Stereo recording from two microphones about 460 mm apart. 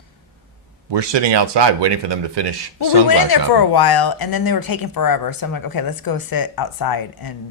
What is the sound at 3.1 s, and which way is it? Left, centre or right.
Speech, left.